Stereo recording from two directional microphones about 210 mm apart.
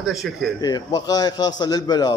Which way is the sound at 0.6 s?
20° left (ahead or behind).